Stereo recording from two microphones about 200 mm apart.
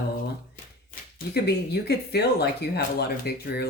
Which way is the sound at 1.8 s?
55° left (ahead or behind).